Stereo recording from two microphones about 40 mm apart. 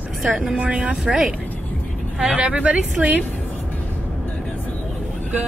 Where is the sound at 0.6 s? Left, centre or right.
Right.